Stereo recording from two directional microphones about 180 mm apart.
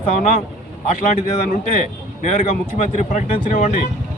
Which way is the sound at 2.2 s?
45° left (ahead or behind).